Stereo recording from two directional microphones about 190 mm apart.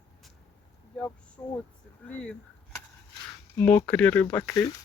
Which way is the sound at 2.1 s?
5° left (ahead or behind).